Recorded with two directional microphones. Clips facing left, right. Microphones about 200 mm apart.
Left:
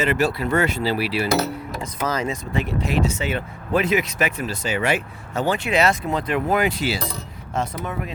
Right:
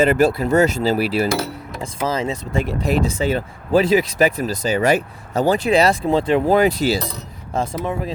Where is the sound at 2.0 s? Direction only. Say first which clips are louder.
Right 3 dB; 25° right (ahead or behind).